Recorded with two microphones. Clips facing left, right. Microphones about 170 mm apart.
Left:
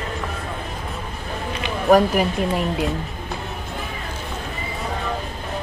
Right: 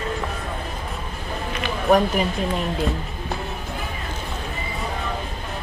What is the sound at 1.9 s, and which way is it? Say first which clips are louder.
Speech: left 3 dB; 5° left (ahead or behind).